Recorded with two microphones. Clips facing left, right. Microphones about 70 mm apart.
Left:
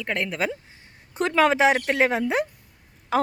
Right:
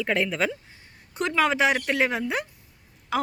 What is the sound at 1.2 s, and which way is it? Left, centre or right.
Speech, left.